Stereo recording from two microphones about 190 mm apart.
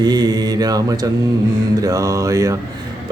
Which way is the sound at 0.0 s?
20° right (ahead or behind).